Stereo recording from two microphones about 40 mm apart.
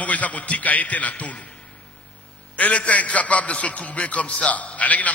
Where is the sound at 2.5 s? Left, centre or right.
Left.